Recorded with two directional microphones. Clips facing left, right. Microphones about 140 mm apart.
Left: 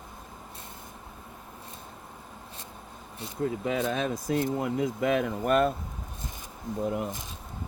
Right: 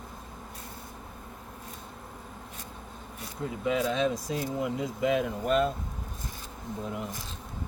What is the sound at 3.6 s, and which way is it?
Speech, 50° left (ahead or behind).